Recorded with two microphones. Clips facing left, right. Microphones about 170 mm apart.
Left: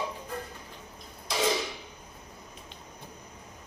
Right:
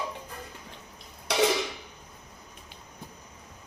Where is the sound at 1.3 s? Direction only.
70° right (ahead or behind).